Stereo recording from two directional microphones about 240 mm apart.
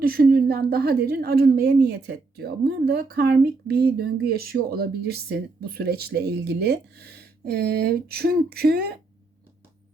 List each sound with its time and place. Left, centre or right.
0.0 s speech: right